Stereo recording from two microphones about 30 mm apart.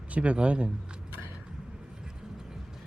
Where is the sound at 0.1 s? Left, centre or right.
Right.